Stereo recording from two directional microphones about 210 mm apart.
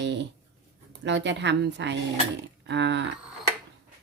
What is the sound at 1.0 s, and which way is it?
Speech, 55° right (ahead or behind).